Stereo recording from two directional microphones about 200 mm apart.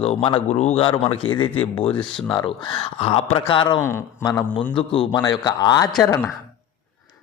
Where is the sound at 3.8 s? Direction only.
10° left (ahead or behind).